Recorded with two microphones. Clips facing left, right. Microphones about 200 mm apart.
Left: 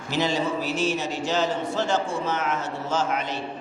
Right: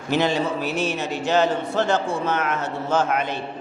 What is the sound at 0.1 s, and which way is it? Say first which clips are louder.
A man's voice: right 3 dB; 60° right (ahead or behind).